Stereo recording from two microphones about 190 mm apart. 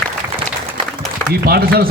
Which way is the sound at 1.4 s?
50° right (ahead or behind).